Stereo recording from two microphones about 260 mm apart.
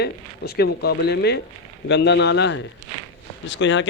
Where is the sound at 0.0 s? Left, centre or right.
Left.